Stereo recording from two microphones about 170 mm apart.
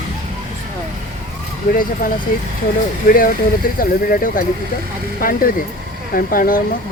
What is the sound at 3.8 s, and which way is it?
Speech, 55° left (ahead or behind).